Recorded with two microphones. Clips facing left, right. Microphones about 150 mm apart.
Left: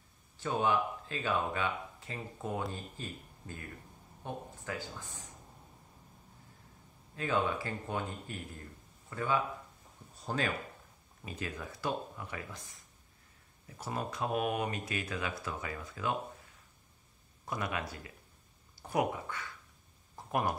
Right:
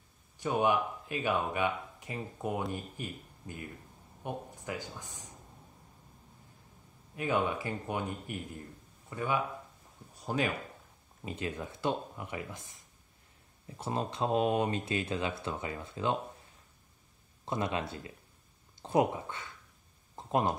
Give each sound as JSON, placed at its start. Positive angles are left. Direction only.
{"t": 0.4, "sound": "speech", "side_deg": -15}
{"t": 7.2, "sound": "speech", "side_deg": -15}
{"t": 13.7, "sound": "speech", "side_deg": -25}
{"t": 17.5, "sound": "speech", "side_deg": -25}
{"t": 20.2, "sound": "a sound", "side_deg": -20}